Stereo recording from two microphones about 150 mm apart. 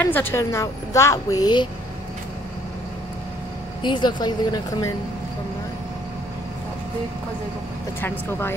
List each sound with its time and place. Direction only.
0.0 s a woman's voice: 15° left (ahead or behind)
3.8 s a woman's voice: 30° left (ahead or behind)
8.0 s speech: 15° left (ahead or behind)